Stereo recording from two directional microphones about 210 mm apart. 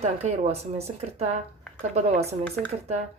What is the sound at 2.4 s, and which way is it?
Speech, 5° left (ahead or behind).